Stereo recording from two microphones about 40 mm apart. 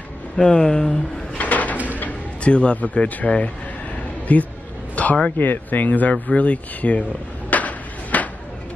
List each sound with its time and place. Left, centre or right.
0.4 s speech: centre
1.4 s bird: left
2.4 s speech: left
4.9 s a sound: left
5.4 s speech: left
6.2 s a sound: left